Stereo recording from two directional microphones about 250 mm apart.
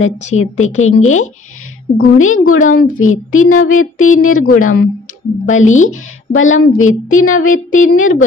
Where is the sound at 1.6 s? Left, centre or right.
Left.